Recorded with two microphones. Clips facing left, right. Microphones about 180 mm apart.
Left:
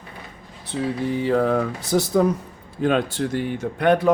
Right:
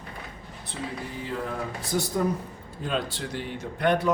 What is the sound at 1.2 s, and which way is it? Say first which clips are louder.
Speech: left 12 dB; 90° left.